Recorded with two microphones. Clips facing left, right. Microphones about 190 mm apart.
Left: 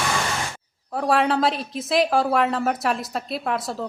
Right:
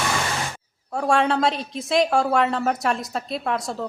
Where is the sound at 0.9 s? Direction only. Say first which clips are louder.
Even; centre (ahead or behind).